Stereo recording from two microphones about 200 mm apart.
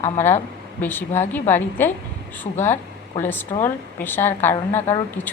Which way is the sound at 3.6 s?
10° left (ahead or behind).